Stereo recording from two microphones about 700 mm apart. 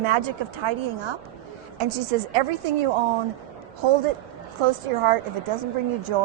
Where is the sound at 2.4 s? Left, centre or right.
Right.